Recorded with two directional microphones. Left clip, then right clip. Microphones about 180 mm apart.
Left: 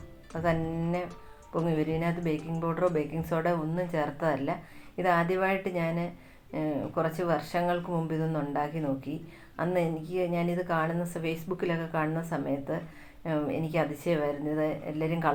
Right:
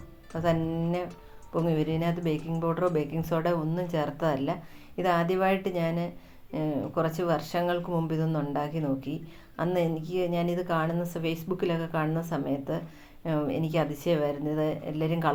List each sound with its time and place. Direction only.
0.3 s speech: 30° right (ahead or behind)